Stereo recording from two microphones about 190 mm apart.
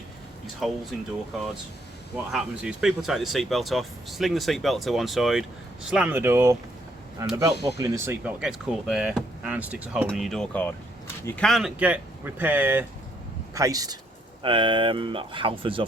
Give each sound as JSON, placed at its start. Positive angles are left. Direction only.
{"t": 0.6, "sound": "speech", "side_deg": 0}
{"t": 2.1, "sound": "speech", "side_deg": -5}